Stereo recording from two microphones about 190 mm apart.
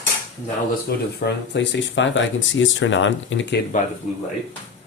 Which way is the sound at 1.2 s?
65° left (ahead or behind).